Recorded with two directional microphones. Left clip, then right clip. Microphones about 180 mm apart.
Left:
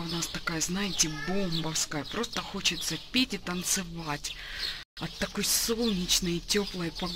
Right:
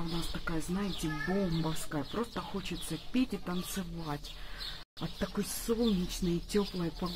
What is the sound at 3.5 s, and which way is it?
Speech, 15° left (ahead or behind).